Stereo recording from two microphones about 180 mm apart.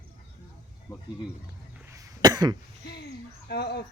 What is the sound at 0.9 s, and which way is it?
Speech, 20° left (ahead or behind).